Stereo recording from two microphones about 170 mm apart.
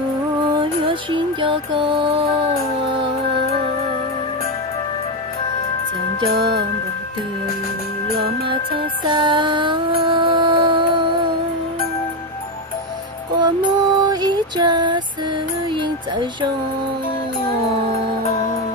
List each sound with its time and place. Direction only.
0.6 s music: 30° right (ahead or behind)
9.1 s music: 30° right (ahead or behind)
13.4 s music: 25° right (ahead or behind)